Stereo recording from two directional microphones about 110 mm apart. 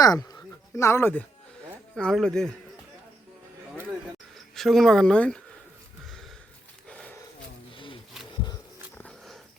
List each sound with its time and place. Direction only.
0.0 s speech: 35° left (ahead or behind)
2.0 s speech: 5° left (ahead or behind)
4.5 s speech: centre (ahead or behind)
6.8 s a sound: 10° left (ahead or behind)